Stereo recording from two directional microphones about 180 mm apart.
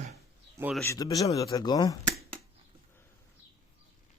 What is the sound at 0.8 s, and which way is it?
Speech, 15° left (ahead or behind).